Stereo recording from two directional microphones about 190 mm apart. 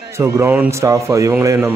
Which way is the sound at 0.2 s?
10° right (ahead or behind).